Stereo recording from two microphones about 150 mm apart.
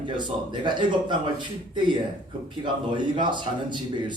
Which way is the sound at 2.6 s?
30° right (ahead or behind).